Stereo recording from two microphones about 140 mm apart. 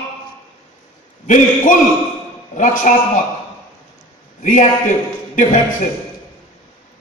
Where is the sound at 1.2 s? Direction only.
65° left (ahead or behind).